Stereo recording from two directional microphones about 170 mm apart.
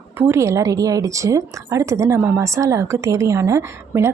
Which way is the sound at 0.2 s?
15° right (ahead or behind).